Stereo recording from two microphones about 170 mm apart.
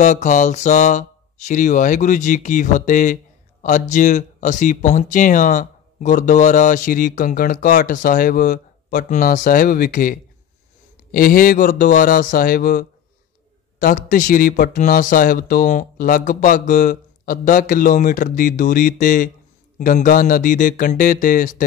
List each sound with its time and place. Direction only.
0.0 s a man's voice: 45° left (ahead or behind)